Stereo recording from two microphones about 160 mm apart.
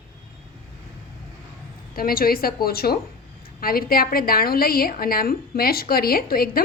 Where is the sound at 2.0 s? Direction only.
65° left (ahead or behind).